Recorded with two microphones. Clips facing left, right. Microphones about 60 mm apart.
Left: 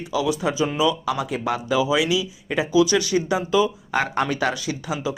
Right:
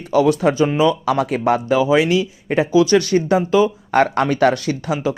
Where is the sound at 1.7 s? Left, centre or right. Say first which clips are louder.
Right 4 dB; right.